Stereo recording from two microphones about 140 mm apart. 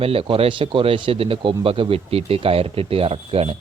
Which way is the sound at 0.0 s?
40° right (ahead or behind).